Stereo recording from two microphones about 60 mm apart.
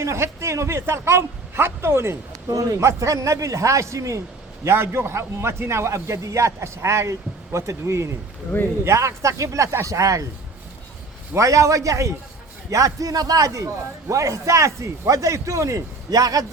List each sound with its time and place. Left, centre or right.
0.0 s a man's voice: right
2.5 s a man's voice: right
2.8 s a man's voice: right
4.6 s a man's voice: right
11.3 s a man's voice: right
12.7 s a man's voice: right